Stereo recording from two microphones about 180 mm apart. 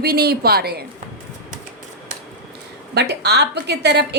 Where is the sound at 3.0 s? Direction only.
70° right (ahead or behind).